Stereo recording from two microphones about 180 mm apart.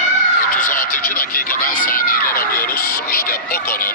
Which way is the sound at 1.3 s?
55° left (ahead or behind).